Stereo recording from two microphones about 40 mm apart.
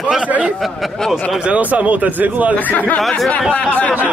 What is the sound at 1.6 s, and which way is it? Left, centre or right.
Speech, right.